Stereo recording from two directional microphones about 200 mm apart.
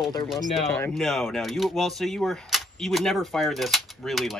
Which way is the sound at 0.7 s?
5° left (ahead or behind).